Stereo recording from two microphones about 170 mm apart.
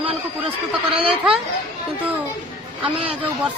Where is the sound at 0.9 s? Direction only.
5° right (ahead or behind).